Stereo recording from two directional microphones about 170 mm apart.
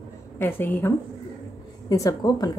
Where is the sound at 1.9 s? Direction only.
20° left (ahead or behind).